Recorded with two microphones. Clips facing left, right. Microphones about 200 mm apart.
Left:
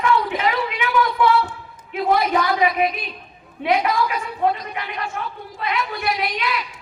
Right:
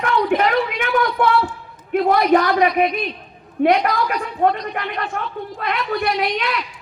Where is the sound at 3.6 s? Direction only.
50° right (ahead or behind).